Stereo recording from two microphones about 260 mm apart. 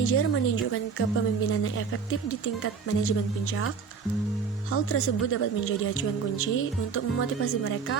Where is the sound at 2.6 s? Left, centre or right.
Left.